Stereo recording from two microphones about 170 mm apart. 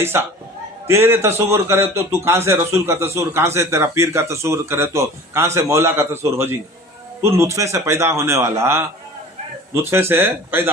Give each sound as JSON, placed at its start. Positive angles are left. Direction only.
{"t": 0.0, "sound": "a man's voice", "side_deg": -15}
{"t": 9.8, "sound": "a man's voice", "side_deg": -15}